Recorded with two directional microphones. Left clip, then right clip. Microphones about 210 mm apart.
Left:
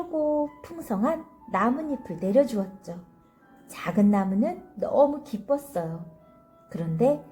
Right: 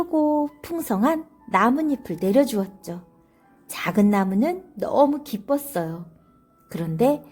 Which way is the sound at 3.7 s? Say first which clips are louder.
Right 4 dB; 45° right (ahead or behind).